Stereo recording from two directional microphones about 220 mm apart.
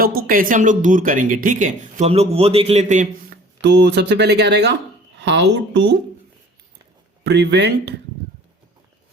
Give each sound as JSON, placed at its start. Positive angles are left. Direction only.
{"t": 0.0, "sound": "speech", "side_deg": -40}
{"t": 3.6, "sound": "speech", "side_deg": -50}
{"t": 7.3, "sound": "speech", "side_deg": -50}